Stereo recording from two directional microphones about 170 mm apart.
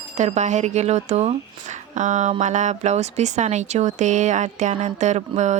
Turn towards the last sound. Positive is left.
turn(degrees=-45)  # may be behind; listen again after turning